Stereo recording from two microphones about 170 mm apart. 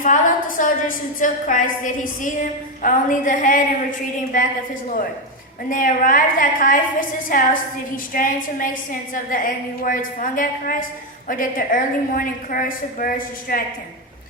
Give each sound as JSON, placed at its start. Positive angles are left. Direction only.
{"t": 0.0, "sound": "a woman's voice", "side_deg": 50}
{"t": 5.6, "sound": "a woman's voice", "side_deg": 50}